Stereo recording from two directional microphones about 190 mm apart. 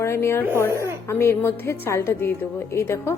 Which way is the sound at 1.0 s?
15° left (ahead or behind).